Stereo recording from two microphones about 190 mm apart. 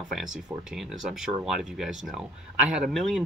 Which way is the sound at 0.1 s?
Centre (ahead or behind).